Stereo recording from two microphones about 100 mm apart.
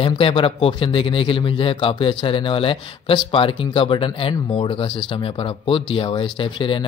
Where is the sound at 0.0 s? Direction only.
65° left (ahead or behind).